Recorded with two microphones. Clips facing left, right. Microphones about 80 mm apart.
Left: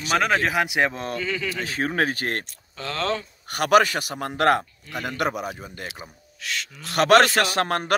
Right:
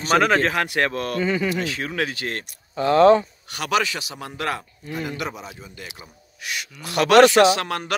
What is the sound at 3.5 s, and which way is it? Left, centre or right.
A man's voice, left.